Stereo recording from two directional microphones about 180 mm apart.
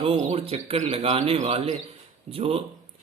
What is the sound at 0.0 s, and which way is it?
Speech, 30° right (ahead or behind).